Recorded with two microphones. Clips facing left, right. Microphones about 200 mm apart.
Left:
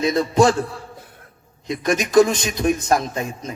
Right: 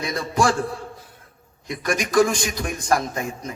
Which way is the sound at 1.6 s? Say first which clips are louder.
Left 4 dB; 20° left (ahead or behind).